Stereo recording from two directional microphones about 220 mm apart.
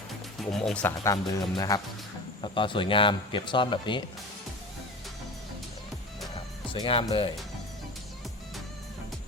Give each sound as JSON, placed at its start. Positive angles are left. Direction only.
{"t": 0.6, "sound": "a man's voice", "side_deg": 5}
{"t": 6.8, "sound": "a man's voice", "side_deg": 25}